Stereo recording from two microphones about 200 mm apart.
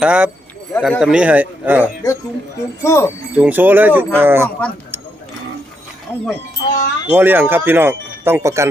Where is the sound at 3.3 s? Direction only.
10° right (ahead or behind).